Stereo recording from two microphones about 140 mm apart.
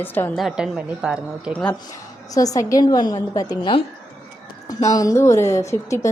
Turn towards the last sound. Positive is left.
turn(degrees=20)  # may be behind; listen again after turning